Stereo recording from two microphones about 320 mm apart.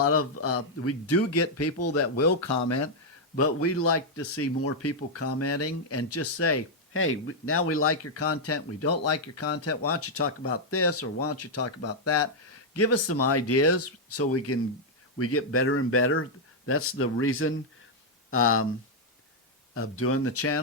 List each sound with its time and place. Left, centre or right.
0.0 s speech: left
3.4 s speech: left
19.7 s speech: left